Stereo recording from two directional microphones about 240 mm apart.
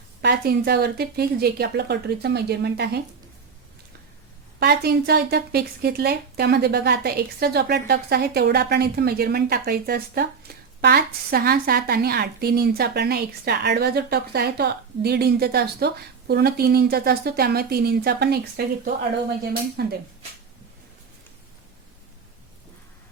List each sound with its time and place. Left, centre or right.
0.2 s a woman's voice: right
4.6 s speech: right
19.8 s speech: right